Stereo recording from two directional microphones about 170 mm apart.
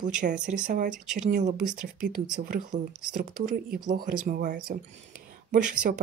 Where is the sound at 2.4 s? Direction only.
60° right (ahead or behind).